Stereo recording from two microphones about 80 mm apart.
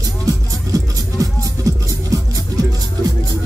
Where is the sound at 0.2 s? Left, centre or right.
Right.